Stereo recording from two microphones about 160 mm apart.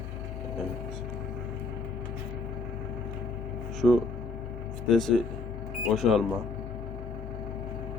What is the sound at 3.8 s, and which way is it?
Speech, centre (ahead or behind).